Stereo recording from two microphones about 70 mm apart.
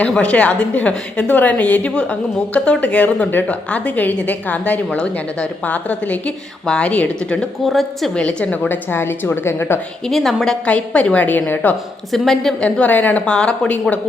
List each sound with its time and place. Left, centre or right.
0.1 s a woman's voice: centre
7.6 s a woman's voice: centre
8.1 s a woman's voice: centre; by 9.8 s left
10.1 s a woman's voice: centre
10.7 s a woman's voice: centre
12.1 s a woman's voice: centre
12.6 s a woman's voice: centre